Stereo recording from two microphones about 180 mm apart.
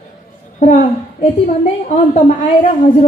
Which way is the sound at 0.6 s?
45° left (ahead or behind).